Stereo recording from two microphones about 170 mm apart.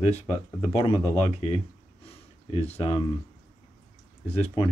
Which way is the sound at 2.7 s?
30° left (ahead or behind).